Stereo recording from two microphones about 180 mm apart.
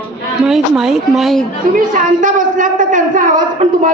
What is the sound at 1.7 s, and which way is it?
A woman's voice, 45° right (ahead or behind).